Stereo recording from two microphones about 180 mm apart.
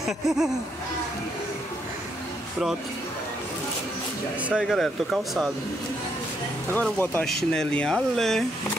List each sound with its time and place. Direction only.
0.0 s speech: centre (ahead or behind)
4.5 s speech: centre (ahead or behind)
6.7 s speech: 10° left (ahead or behind)